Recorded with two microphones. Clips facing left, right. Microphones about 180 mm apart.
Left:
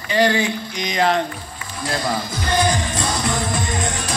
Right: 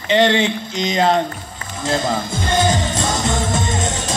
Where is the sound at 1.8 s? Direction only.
25° right (ahead or behind).